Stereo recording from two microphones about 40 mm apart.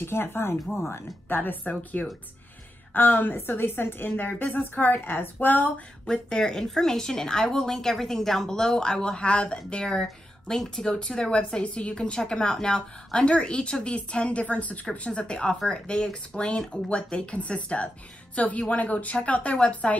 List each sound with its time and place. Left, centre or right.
0.0 s speech: left
1.4 s a woman's voice: left
3.3 s a woman's voice: left
4.4 s a woman's voice: left
6.0 s a woman's voice: centre
12.3 s a woman's voice: centre; by 14.8 s left
15.0 s a woman's voice: left